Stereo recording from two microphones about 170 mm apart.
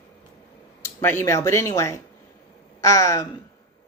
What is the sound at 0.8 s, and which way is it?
A woman's voice, 15° left (ahead or behind).